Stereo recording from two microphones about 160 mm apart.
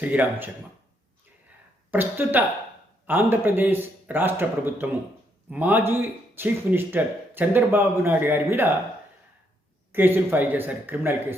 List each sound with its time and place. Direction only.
0.0 s speech: 10° right (ahead or behind)
1.9 s speech: 10° right (ahead or behind)
9.9 s speech: 15° right (ahead or behind)